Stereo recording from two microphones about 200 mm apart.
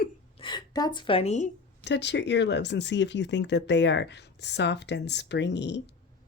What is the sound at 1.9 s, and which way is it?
Speech, 60° left (ahead or behind).